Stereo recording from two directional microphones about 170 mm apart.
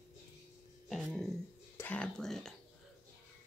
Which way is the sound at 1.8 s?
10° left (ahead or behind).